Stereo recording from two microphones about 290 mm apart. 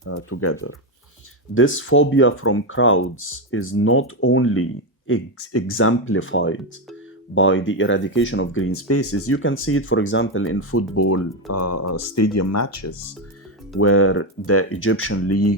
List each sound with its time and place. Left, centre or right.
0.0 s speech: left
1.5 s speech: left
13.7 s speech: left